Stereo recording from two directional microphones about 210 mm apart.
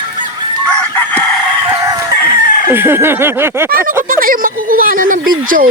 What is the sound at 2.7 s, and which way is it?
Speech, 10° right (ahead or behind).